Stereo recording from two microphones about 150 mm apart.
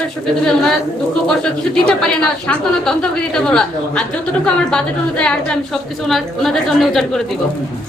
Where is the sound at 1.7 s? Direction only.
5° left (ahead or behind).